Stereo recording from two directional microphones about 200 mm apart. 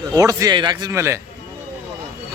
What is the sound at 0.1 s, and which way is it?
A man's voice, 15° right (ahead or behind).